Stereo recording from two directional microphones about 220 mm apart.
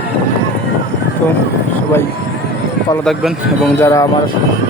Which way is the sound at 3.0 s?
Centre (ahead or behind).